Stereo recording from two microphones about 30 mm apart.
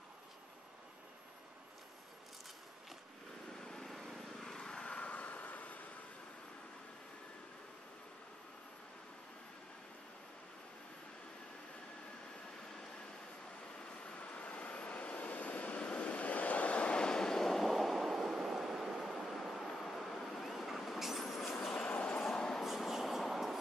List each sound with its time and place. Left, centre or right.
3.8 s vehicle: centre
4.6 s vehicle: left
4.8 s vehicle: left
5.4 s vehicle: left
14.0 s vehicle: left
17.0 s vehicle: left
17.5 s vehicle: centre
22.2 s train: centre
22.8 s train: centre